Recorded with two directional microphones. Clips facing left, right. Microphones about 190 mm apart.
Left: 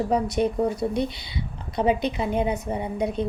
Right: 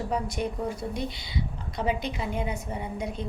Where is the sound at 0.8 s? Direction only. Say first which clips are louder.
Left 7 dB; 65° left (ahead or behind).